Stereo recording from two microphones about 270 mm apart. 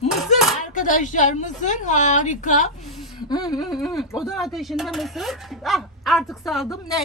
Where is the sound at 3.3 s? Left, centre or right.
Centre.